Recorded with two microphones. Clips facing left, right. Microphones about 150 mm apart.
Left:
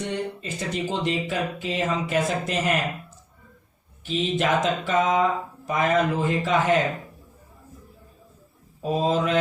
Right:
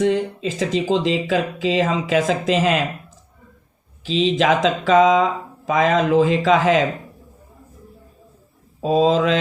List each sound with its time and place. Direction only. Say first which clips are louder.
0.0 s speech: right 10 dB; 90° right
4.0 s speech: right 6 dB; 90° right
8.8 s speech: right 7 dB; 90° right